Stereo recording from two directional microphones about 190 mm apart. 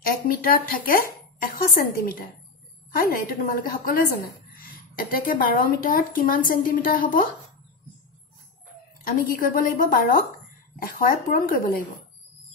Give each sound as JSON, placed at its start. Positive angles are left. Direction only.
{"t": 0.0, "sound": "a woman's voice", "side_deg": 50}
{"t": 9.0, "sound": "a woman's voice", "side_deg": 50}